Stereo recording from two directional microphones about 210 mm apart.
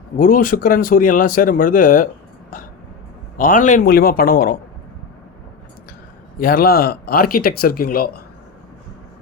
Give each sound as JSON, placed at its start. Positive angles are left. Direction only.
{"t": 0.2, "sound": "speech", "side_deg": 40}
{"t": 3.3, "sound": "speech", "side_deg": 40}
{"t": 6.4, "sound": "speech", "side_deg": 45}